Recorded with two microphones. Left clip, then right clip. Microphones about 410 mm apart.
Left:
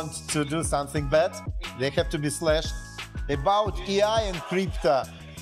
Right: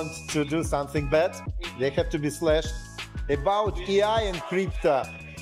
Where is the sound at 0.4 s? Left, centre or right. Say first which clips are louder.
Right 1 dB; left.